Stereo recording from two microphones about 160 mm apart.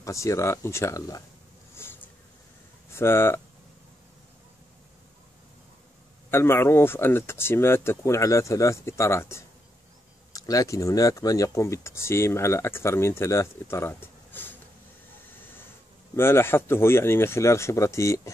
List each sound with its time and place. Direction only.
0.0 s speech: 20° left (ahead or behind)
2.9 s speech: 15° left (ahead or behind)
6.3 s speech: 15° left (ahead or behind)
16.2 s speech: 15° left (ahead or behind)